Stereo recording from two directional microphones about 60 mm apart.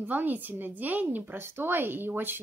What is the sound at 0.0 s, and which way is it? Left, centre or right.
A woman's voice, right.